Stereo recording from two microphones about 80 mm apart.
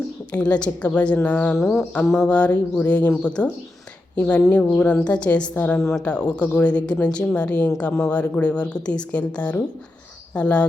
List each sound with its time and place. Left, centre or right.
0.3 s a woman's voice: centre
1.5 s music: centre
1.8 s a woman's voice: centre